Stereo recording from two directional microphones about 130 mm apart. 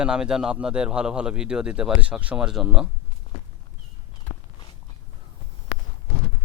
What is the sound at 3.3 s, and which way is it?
Walk, 45° left (ahead or behind).